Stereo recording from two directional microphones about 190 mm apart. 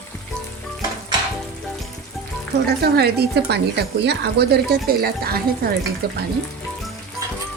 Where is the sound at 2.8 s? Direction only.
55° right (ahead or behind).